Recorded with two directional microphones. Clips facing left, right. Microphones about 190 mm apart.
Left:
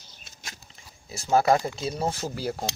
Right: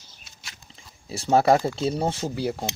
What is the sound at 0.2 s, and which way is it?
Biting, 50° left (ahead or behind).